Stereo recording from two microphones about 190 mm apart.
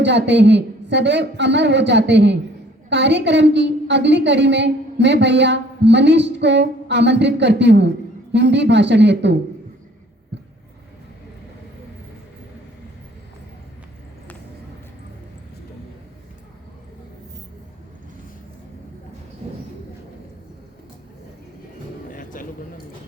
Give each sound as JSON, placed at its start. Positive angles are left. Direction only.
{"t": 0.0, "sound": "a woman's voice", "side_deg": -65}
{"t": 19.4, "sound": "a sound", "side_deg": -30}
{"t": 22.1, "sound": "music", "side_deg": 45}